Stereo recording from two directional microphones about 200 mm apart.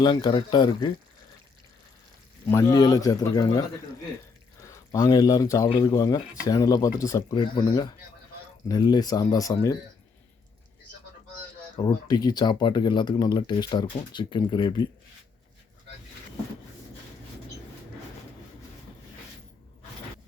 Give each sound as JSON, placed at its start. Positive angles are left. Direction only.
{"t": 0.0, "sound": "speech", "side_deg": 20}
{"t": 2.5, "sound": "speech", "side_deg": 15}
{"t": 11.8, "sound": "speech", "side_deg": 20}